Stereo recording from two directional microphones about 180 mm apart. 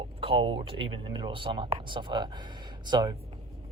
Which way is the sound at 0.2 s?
30° right (ahead or behind).